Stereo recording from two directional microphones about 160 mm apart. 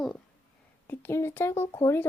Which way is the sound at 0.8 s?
15° left (ahead or behind).